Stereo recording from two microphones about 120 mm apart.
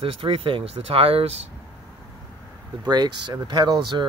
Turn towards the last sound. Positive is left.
turn(degrees=-40)  # may be behind; listen again after turning